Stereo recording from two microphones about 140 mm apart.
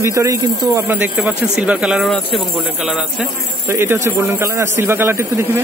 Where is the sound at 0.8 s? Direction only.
10° right (ahead or behind).